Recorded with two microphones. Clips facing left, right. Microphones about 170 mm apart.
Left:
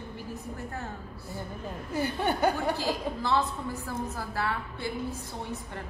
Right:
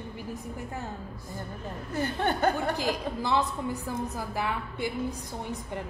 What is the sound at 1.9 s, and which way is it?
Speech, 10° left (ahead or behind).